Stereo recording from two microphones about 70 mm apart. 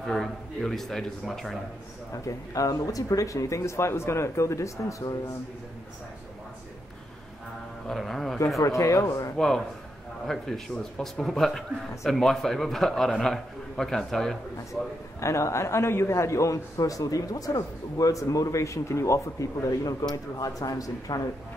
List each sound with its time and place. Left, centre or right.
0.0 s a man's voice: centre
2.2 s a man's voice: left
7.9 s a man's voice: centre
8.5 s a man's voice: left
9.4 s a man's voice: centre
14.7 s a man's voice: left